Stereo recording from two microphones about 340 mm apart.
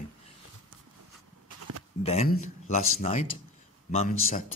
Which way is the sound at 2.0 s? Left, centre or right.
Centre.